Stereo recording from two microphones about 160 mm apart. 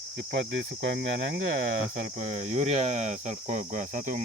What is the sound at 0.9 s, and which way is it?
Speech, 90° right.